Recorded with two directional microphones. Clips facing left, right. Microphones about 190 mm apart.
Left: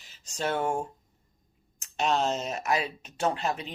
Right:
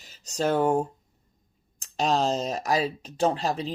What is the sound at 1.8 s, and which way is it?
Speech, 35° right (ahead or behind).